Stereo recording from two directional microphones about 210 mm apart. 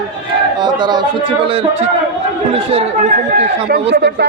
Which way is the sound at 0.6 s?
20° right (ahead or behind).